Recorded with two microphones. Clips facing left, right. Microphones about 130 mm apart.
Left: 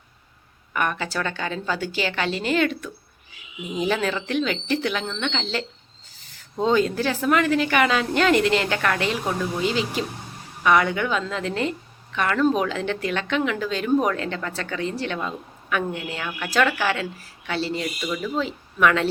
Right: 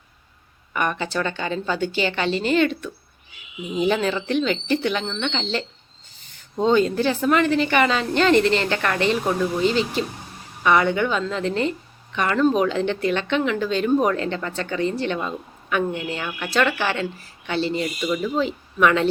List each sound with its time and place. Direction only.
0.7 s speech: centre (ahead or behind)
6.6 s speech: centre (ahead or behind)